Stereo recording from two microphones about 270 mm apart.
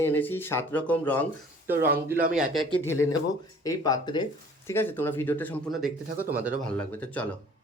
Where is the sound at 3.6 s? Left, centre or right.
Centre.